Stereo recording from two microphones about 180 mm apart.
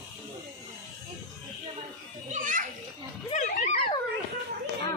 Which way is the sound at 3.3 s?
40° left (ahead or behind).